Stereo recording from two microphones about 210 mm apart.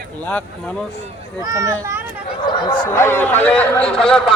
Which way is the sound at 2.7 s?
10° left (ahead or behind).